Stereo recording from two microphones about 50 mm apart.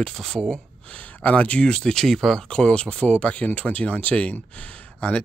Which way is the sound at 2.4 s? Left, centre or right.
Left.